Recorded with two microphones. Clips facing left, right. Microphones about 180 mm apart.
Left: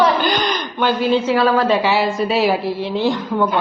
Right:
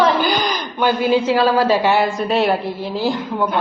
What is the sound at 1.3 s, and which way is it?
Speech, 35° right (ahead or behind).